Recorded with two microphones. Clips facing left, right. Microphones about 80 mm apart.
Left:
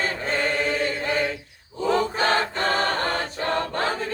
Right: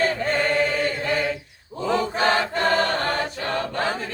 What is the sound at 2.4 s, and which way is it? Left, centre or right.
Choir, left.